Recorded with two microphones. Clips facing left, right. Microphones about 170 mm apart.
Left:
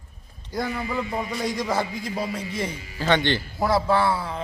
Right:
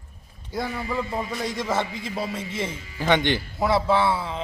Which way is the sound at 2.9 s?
15° right (ahead or behind).